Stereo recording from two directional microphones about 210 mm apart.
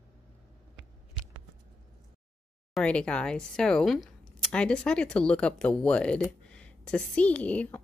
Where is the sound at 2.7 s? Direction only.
5° left (ahead or behind).